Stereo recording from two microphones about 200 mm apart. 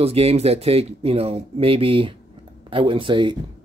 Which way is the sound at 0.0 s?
30° right (ahead or behind).